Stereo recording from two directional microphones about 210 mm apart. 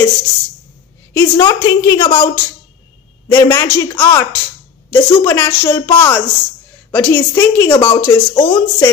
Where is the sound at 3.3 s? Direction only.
15° left (ahead or behind).